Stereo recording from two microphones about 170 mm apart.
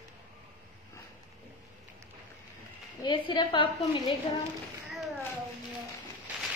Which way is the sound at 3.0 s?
30° left (ahead or behind).